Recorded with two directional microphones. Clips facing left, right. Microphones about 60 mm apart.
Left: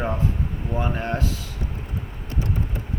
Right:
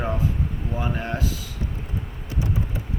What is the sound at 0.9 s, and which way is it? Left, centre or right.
Speech, centre.